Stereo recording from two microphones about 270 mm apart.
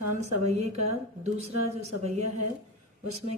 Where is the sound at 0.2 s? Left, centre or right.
Right.